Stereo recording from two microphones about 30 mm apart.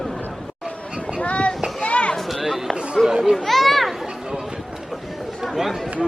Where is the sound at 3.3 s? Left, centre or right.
Centre.